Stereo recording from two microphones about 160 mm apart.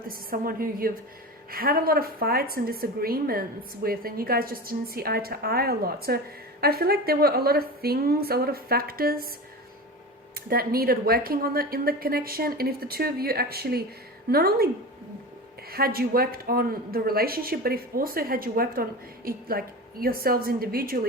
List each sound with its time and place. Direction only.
0.1 s a woman's voice: 65° right (ahead or behind)
10.5 s a woman's voice: 70° right (ahead or behind)
15.7 s a woman's voice: 70° right (ahead or behind)